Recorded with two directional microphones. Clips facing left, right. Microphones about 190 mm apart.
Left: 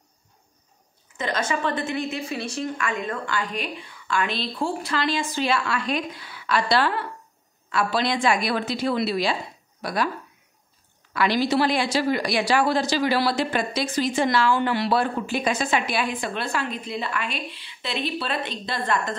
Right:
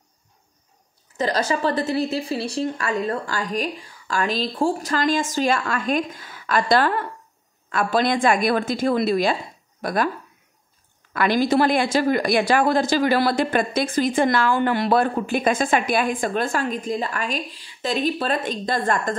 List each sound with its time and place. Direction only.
1.1 s a woman's voice: 35° right (ahead or behind)
11.1 s speech: 50° right (ahead or behind)